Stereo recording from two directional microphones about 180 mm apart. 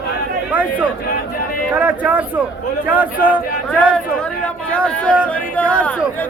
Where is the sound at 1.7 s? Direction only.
10° right (ahead or behind).